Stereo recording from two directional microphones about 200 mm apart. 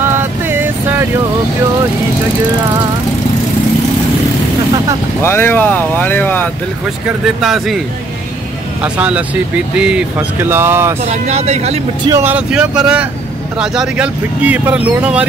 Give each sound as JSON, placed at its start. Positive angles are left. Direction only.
{"t": 0.5, "sound": "vehicle", "side_deg": -10}
{"t": 5.2, "sound": "speech", "side_deg": 10}
{"t": 7.1, "sound": "speech", "side_deg": 0}
{"t": 8.8, "sound": "speech", "side_deg": -5}
{"t": 11.1, "sound": "speech", "side_deg": -35}
{"t": 12.1, "sound": "speech", "side_deg": -10}